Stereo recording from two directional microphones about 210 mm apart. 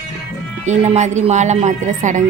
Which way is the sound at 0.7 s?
35° right (ahead or behind).